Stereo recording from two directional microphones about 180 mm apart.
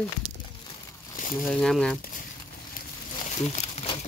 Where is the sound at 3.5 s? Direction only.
35° left (ahead or behind).